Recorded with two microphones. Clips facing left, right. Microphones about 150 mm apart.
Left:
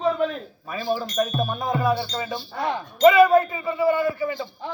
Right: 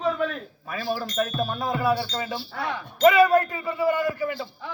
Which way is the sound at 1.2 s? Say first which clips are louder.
Left 2 dB; 20° left (ahead or behind).